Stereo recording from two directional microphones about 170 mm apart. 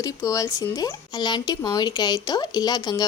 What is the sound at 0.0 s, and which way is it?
Speech, 20° left (ahead or behind).